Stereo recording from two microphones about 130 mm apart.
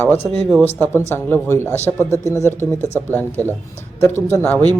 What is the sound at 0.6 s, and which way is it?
Speech, 15° left (ahead or behind).